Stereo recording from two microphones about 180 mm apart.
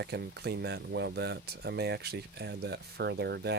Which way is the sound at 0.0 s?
65° right (ahead or behind).